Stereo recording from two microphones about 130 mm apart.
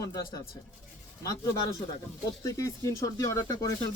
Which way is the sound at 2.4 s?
25° left (ahead or behind).